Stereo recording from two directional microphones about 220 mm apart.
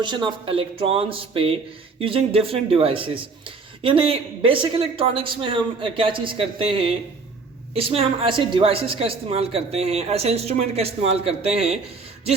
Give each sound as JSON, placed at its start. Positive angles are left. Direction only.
{"t": 0.0, "sound": "speech", "side_deg": -20}